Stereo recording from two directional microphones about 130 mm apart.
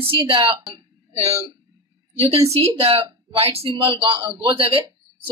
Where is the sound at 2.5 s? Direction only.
50° right (ahead or behind).